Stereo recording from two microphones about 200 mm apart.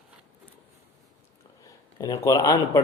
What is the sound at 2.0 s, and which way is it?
Speech, 15° left (ahead or behind).